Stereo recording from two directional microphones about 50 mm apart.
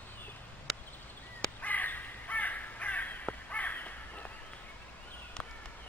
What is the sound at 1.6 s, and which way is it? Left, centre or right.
Crow, left.